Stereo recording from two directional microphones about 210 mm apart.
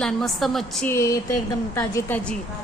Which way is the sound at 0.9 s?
15° left (ahead or behind).